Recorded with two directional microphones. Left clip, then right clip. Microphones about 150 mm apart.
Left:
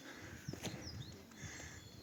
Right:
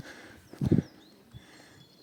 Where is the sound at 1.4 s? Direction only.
20° right (ahead or behind).